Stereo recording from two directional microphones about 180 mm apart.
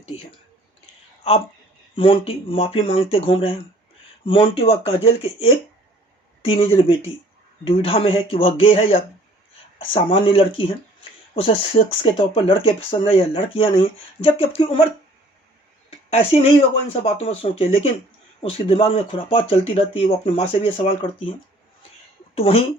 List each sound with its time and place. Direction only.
1.2 s speech: 35° left (ahead or behind)
15.9 s speech: 35° left (ahead or behind)
22.4 s speech: 35° left (ahead or behind)